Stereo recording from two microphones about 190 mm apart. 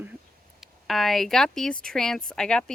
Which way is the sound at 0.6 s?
Centre (ahead or behind).